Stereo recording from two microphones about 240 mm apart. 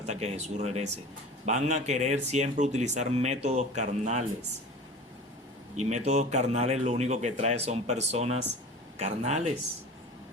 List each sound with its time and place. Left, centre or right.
0.0 s speech: right
5.7 s speech: right